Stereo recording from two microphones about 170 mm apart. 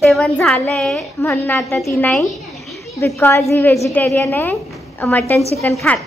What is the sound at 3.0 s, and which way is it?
A woman's voice, 15° left (ahead or behind).